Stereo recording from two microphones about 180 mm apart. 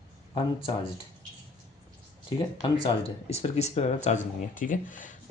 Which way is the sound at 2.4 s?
25° left (ahead or behind).